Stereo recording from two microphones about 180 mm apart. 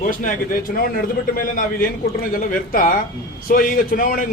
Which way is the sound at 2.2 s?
50° left (ahead or behind).